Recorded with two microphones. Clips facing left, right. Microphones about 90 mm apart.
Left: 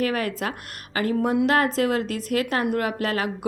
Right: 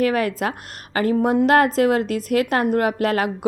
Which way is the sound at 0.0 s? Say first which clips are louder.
Right 5 dB; 40° right (ahead or behind).